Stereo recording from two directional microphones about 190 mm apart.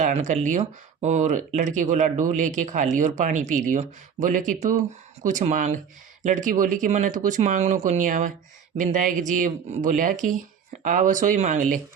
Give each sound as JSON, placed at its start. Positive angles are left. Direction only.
{"t": 0.0, "sound": "speech", "side_deg": -40}